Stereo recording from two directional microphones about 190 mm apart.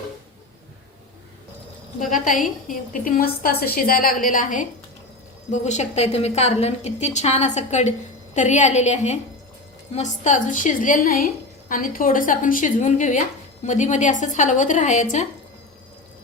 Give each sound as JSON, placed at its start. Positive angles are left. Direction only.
{"t": 2.0, "sound": "a woman's voice", "side_deg": 45}